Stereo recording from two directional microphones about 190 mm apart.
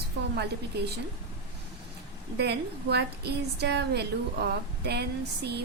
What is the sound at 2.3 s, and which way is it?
A woman's voice, 60° right (ahead or behind).